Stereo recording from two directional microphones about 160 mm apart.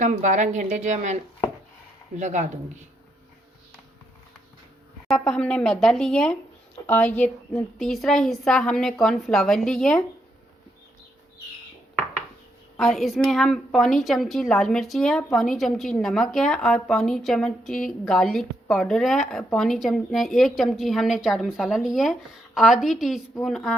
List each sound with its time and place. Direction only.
0.0 s a woman's voice: 50° right (ahead or behind)
5.0 s a woman's voice: 5° left (ahead or behind)
12.7 s a woman's voice: centre (ahead or behind)